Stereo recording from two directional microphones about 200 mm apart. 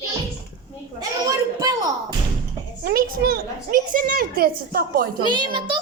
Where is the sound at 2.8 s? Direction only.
50° right (ahead or behind).